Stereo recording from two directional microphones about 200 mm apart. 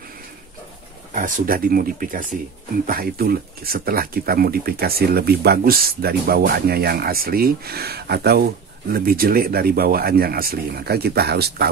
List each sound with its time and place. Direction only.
1.1 s speech: 40° right (ahead or behind)